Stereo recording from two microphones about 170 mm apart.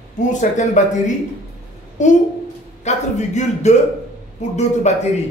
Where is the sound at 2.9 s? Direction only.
40° left (ahead or behind).